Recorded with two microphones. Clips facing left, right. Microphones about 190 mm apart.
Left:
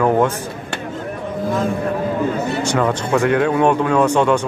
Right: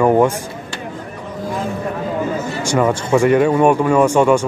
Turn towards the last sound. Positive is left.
turn(degrees=-10)  # may be behind; listen again after turning